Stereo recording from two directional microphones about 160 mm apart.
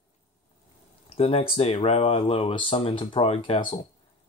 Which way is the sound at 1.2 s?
40° left (ahead or behind).